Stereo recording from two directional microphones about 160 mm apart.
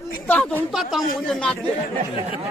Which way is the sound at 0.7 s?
Centre (ahead or behind).